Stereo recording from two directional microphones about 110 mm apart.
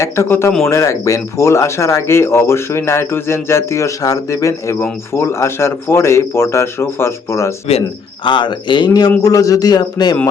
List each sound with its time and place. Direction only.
0.0 s speech: 25° left (ahead or behind)
7.7 s speech: 65° left (ahead or behind)
8.3 s a man's voice: 45° left (ahead or behind)